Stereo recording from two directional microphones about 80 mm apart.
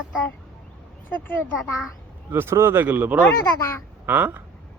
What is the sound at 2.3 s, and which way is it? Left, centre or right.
Speech, right.